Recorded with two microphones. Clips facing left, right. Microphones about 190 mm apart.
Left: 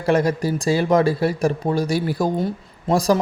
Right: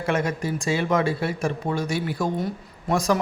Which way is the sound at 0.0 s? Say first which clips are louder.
Left 6 dB; 35° left (ahead or behind).